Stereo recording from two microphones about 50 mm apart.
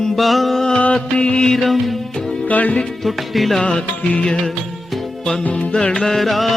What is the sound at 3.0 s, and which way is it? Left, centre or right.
Music, centre.